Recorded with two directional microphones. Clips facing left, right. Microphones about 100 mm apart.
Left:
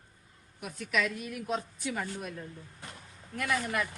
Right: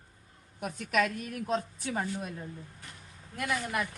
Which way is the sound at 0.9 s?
45° right (ahead or behind).